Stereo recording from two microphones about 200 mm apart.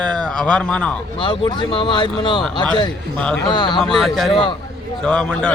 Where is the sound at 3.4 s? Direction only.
20° left (ahead or behind).